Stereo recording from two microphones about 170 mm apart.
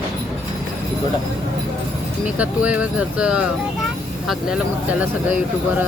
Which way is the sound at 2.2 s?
10° right (ahead or behind).